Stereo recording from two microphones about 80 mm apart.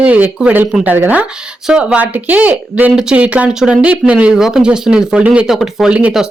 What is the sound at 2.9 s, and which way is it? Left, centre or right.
Speech, centre.